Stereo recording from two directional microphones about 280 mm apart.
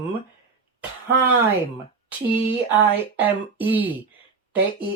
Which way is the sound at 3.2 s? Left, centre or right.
Centre.